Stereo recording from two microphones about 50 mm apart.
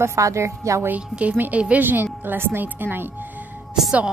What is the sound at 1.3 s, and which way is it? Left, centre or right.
A woman's voice, right.